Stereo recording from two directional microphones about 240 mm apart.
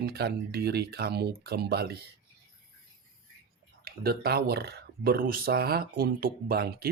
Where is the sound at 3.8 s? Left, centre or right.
Right.